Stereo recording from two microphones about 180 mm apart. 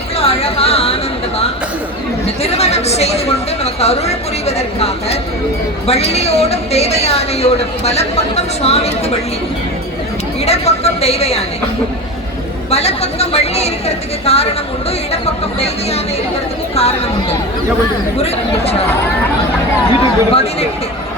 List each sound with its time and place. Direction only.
0.2 s chatter: 35° left (ahead or behind)
2.2 s chatter: 35° left (ahead or behind)
3.6 s a woman's voice: 35° left (ahead or behind)
10.4 s a woman's voice: 35° left (ahead or behind)
12.7 s a woman's voice: 35° left (ahead or behind)
18.2 s a woman's voice: 35° left (ahead or behind)
19.9 s a woman's voice: 35° left (ahead or behind)